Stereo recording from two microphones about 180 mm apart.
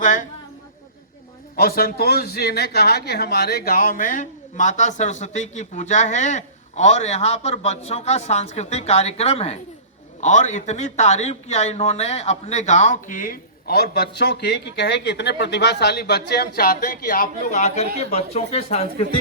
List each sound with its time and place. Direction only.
0.0 s a woman's voice: 45° left (ahead or behind)
1.5 s a man's voice: 55° left (ahead or behind); by 19.0 s 35° left (ahead or behind)